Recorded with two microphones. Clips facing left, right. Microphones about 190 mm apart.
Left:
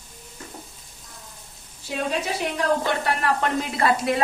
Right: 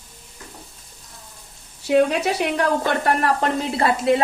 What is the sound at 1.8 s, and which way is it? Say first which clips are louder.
A woman's voice: right 9 dB; 70° right (ahead or behind).